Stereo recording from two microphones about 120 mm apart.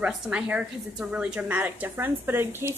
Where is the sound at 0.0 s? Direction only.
10° right (ahead or behind).